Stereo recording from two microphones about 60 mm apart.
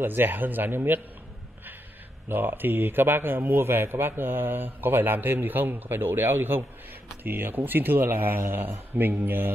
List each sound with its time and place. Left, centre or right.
0.0 s a man's voice: right
2.2 s a man's voice: right